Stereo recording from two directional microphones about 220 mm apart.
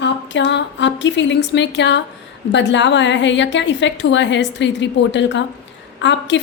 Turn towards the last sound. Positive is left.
turn(degrees=55)  # may be behind; listen again after turning